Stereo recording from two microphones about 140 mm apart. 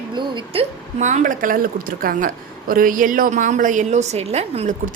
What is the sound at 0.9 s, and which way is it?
A woman's voice, 60° right (ahead or behind).